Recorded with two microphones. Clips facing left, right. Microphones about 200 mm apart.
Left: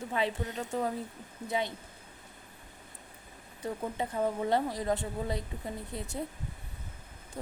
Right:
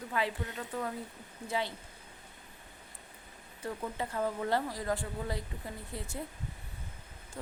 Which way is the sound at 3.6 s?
20° left (ahead or behind).